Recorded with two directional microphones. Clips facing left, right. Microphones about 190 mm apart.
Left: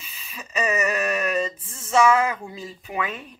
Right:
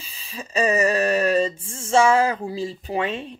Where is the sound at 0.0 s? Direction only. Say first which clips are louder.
Right 5 dB; 30° right (ahead or behind).